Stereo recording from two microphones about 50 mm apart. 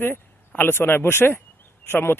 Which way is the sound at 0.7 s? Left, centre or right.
Left.